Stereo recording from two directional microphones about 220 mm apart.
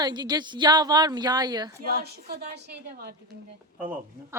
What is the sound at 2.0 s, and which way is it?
A woman's voice, 45° right (ahead or behind).